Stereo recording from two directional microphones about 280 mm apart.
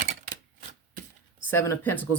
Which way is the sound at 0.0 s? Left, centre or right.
Right.